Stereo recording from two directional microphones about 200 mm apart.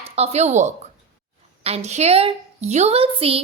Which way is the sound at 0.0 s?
30° right (ahead or behind).